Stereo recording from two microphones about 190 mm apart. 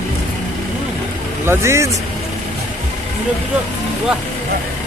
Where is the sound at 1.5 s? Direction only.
15° right (ahead or behind).